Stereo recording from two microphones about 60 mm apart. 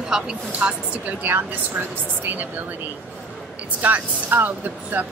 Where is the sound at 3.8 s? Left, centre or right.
Right.